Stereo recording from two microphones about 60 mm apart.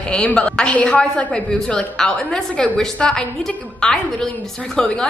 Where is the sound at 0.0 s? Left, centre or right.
Centre.